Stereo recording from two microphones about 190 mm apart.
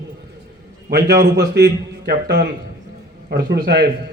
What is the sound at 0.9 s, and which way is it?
A man's voice, 60° right (ahead or behind).